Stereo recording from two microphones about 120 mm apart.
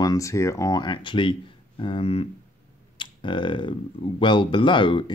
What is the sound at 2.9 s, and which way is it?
Speech, 40° left (ahead or behind).